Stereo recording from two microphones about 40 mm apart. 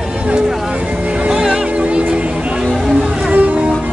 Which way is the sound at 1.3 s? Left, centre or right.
Centre.